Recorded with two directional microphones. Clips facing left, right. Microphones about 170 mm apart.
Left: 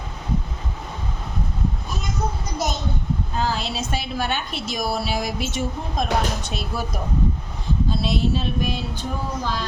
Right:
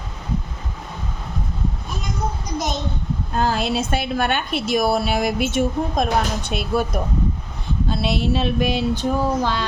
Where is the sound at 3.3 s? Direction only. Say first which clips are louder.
Right 7 dB; 55° right (ahead or behind).